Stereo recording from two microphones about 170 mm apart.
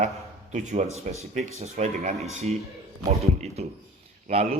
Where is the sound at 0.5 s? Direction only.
45° right (ahead or behind).